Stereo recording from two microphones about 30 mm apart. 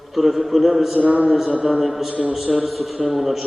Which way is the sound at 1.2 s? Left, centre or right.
Centre.